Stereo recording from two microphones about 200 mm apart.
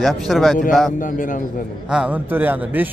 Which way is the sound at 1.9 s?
5° right (ahead or behind).